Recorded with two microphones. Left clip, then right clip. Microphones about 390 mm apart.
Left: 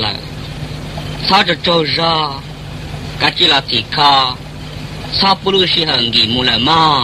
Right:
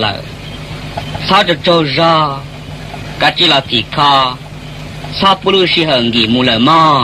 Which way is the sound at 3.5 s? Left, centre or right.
Left.